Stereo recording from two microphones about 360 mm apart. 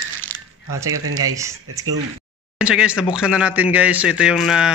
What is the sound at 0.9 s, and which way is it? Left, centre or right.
Speech, right.